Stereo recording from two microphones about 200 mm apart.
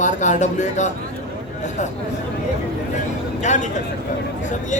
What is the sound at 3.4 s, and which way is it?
Speech, 35° left (ahead or behind).